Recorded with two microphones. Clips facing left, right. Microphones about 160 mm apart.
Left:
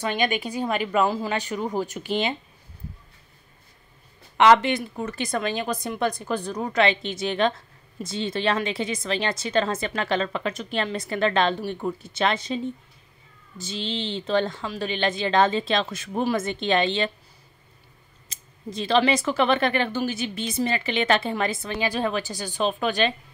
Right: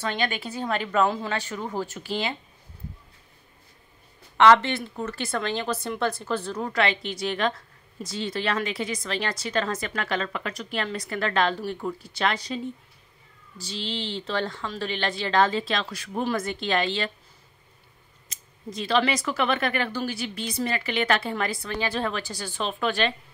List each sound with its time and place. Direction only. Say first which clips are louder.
0.0 s a woman's voice: left 3 dB; 15° left (ahead or behind)
1.3 s a woman's voice: left 3 dB; 15° left (ahead or behind)
4.4 s a woman's voice: left 1 dB; 15° left (ahead or behind)
18.3 s a woman's voice: left 2 dB; 25° left (ahead or behind)
21.7 s a woman's voice: left 2 dB; 10° left (ahead or behind)